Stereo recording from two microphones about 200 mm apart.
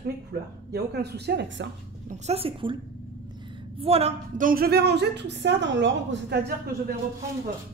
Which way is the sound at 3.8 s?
30° right (ahead or behind).